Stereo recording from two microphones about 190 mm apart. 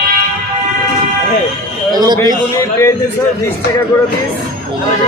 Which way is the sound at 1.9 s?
20° right (ahead or behind).